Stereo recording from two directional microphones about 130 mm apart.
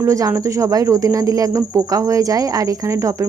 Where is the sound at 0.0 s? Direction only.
25° right (ahead or behind).